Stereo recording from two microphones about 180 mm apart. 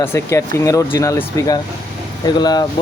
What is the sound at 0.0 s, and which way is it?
Speech, 15° left (ahead or behind).